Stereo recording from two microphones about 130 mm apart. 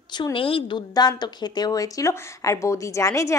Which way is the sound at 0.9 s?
30° left (ahead or behind).